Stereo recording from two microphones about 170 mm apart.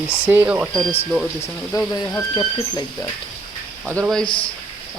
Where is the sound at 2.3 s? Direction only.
30° left (ahead or behind).